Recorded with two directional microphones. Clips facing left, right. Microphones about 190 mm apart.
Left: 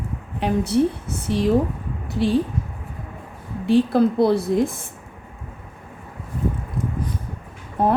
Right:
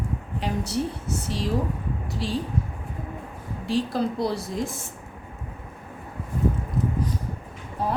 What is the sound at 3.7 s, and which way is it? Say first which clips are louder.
A woman's voice: left 8 dB; 55° left (ahead or behind).